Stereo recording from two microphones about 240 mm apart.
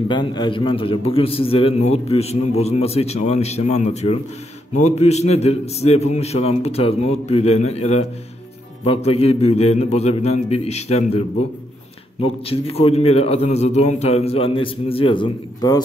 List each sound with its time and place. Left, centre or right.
0.1 s a man's voice: centre
12.4 s a man's voice: left